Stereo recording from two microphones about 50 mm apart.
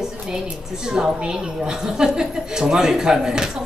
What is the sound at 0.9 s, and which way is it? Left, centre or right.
A woman's voice, centre.